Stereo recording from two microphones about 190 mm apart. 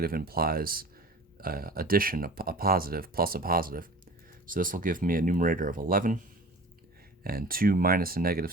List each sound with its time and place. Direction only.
0.0 s speech: 50° right (ahead or behind)
7.3 s speech: 50° right (ahead or behind)